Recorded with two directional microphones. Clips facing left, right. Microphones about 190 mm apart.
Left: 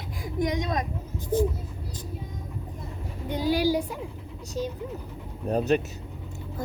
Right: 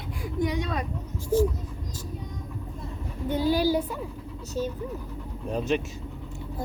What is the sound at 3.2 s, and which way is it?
Speech, 15° left (ahead or behind).